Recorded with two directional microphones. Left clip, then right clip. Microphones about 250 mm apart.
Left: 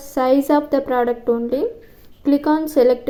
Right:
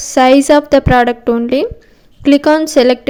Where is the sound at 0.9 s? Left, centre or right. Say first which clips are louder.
Right 7 dB; right.